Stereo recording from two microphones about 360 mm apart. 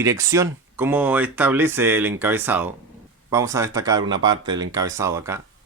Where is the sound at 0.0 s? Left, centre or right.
Centre.